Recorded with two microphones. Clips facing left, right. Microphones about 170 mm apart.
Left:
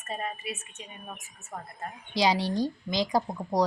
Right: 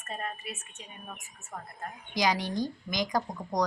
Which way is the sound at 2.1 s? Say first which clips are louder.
Left 3 dB; 30° left (ahead or behind).